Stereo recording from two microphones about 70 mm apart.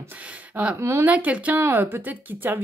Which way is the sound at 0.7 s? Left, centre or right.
Right.